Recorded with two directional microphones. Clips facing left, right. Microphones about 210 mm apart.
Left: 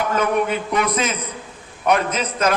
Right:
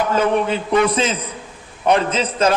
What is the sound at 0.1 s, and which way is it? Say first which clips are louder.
A man's voice: right 2 dB; 30° right (ahead or behind).